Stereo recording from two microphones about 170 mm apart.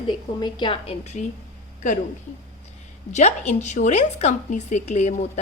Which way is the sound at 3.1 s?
40° left (ahead or behind).